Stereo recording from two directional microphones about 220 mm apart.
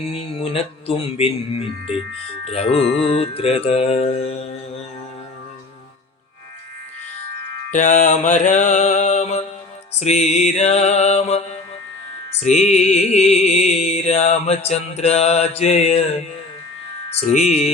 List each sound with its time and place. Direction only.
0.0 s speech: 25° left (ahead or behind)
7.7 s mantra: 35° left (ahead or behind)
12.4 s music: 30° left (ahead or behind)
17.2 s mantra: 30° left (ahead or behind)